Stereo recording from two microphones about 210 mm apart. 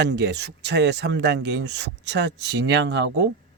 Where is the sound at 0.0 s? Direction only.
55° right (ahead or behind).